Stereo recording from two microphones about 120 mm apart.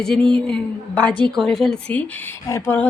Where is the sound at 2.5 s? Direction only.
20° left (ahead or behind).